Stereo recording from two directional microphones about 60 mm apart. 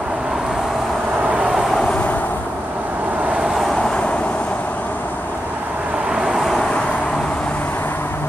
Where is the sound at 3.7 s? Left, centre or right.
Centre.